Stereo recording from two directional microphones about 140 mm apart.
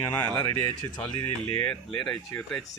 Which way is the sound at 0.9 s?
5° left (ahead or behind).